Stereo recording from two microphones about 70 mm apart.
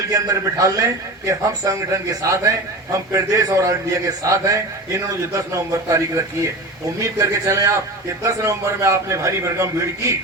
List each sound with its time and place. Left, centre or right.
0.1 s a man's voice: right